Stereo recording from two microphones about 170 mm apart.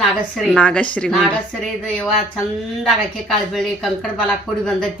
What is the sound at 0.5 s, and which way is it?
Speech, 5° left (ahead or behind).